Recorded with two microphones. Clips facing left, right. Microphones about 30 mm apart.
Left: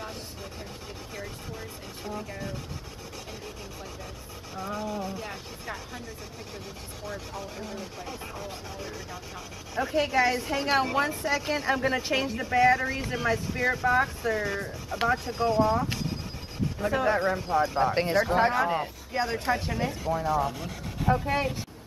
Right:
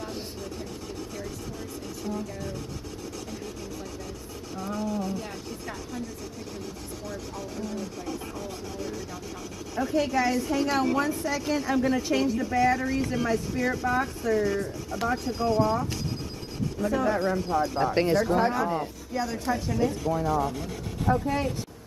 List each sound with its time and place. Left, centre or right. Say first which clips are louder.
2.0 s a sound: right 1 dB; left
4.6 s rub: right 2 dB; left
7.1 s rub: left 1 dB; left
9.8 s a woman's voice: left 1 dB; left
16.8 s a woman's voice: even; left
20.1 s speech: right 1 dB; centre